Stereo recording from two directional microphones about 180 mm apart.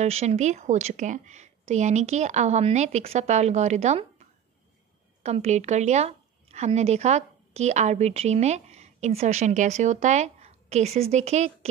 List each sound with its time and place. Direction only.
0.0 s a woman's voice: 35° right (ahead or behind)
5.2 s a woman's voice: 35° right (ahead or behind)